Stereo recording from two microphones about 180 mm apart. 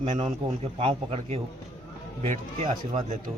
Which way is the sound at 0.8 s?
30° right (ahead or behind).